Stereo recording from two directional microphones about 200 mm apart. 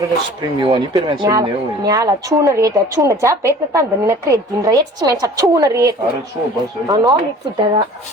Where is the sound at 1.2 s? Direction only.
20° right (ahead or behind).